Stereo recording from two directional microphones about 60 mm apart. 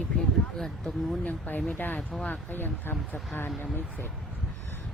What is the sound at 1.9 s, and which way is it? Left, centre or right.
Speech, centre.